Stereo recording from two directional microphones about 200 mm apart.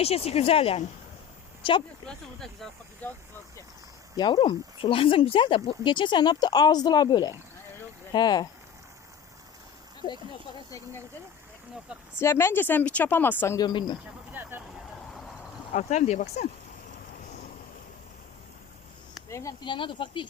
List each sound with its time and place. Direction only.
0.0 s speech: 30° left (ahead or behind)
2.0 s speech: 5° left (ahead or behind)
4.2 s speech: 25° left (ahead or behind)
12.2 s speech: 10° left (ahead or behind)
14.4 s speech: 10° right (ahead or behind)
15.7 s speech: 35° left (ahead or behind)
19.3 s speech: 15° left (ahead or behind)